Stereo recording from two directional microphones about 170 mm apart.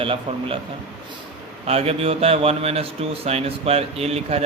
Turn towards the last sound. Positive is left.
turn(degrees=-40)  # may be behind; listen again after turning